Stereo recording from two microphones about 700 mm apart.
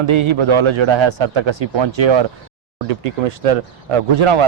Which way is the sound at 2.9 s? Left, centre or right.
Right.